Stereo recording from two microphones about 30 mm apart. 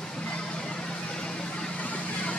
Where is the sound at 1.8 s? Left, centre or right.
Left.